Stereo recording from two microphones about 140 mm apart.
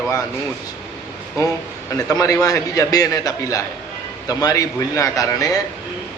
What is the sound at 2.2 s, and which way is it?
A man's voice, 25° left (ahead or behind).